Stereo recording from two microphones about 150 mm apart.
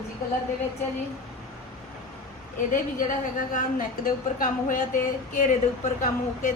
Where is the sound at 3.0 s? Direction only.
65° left (ahead or behind).